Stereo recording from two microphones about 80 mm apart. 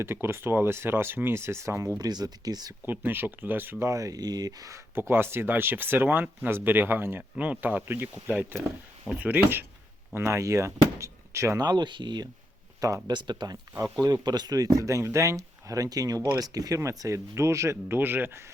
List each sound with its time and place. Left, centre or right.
0.0 s speech: right
2.0 s speech: right
2.8 s speech: right
3.8 s speech: right
4.9 s speech: right
10.2 s speech: right
11.6 s speech: right
12.8 s speech: right
13.1 s speech: right
14.0 s speech: right